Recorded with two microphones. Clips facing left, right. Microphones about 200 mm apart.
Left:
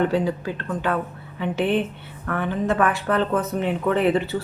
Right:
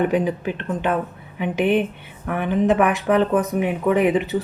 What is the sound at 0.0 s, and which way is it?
Speech, 15° right (ahead or behind).